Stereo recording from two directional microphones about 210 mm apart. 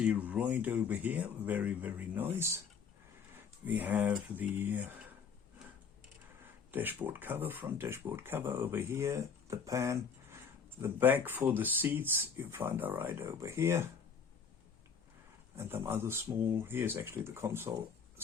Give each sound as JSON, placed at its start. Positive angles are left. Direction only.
{"t": 0.0, "sound": "speech", "side_deg": -10}
{"t": 3.6, "sound": "speech", "side_deg": -10}
{"t": 6.7, "sound": "speech", "side_deg": -10}
{"t": 15.5, "sound": "speech", "side_deg": -10}